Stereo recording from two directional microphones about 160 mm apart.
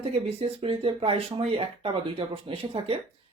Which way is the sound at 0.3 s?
35° right (ahead or behind).